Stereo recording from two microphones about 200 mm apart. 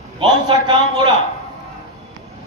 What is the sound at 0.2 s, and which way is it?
Speech, 25° right (ahead or behind).